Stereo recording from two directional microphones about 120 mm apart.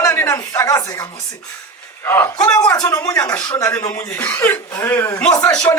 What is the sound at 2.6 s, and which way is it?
Speech, 30° left (ahead or behind).